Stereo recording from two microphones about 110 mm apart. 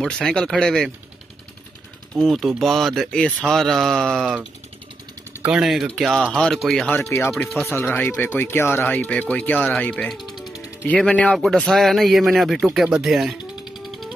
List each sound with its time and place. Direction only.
0.0 s speech: 5° left (ahead or behind)
2.1 s speech: centre (ahead or behind)
5.4 s speech: 5° right (ahead or behind)
7.1 s speech: 25° left (ahead or behind)
9.8 s music: 10° left (ahead or behind); by 10.9 s 5° right (ahead or behind)
10.9 s speech: 10° left (ahead or behind)
13.0 s music: centre (ahead or behind)